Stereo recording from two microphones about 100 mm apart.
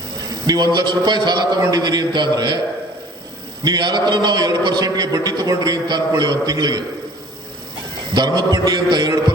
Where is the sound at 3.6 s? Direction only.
45° right (ahead or behind).